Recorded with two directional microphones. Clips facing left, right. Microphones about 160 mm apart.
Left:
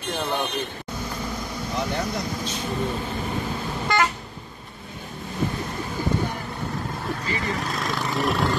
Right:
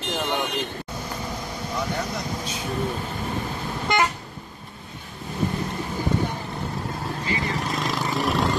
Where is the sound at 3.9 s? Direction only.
20° right (ahead or behind).